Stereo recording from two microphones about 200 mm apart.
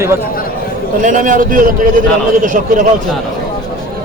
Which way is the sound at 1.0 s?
40° right (ahead or behind).